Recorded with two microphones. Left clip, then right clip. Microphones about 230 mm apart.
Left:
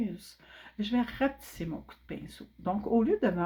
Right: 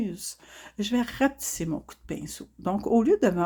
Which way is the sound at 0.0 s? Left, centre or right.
Right.